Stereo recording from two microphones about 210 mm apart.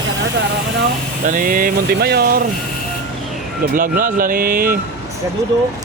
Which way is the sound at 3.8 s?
40° right (ahead or behind).